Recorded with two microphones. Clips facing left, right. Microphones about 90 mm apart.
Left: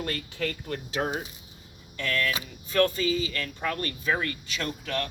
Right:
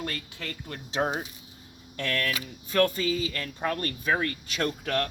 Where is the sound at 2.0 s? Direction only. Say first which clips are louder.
Left 1 dB; 55° right (ahead or behind).